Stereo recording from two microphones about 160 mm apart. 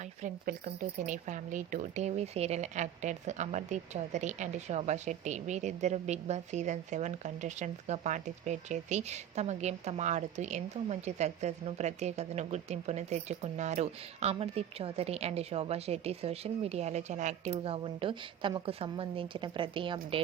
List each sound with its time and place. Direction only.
0.2 s speech: 50° right (ahead or behind); by 20.2 s 35° right (ahead or behind)